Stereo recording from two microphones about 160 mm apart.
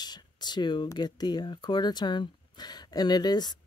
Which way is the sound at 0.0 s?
25° left (ahead or behind).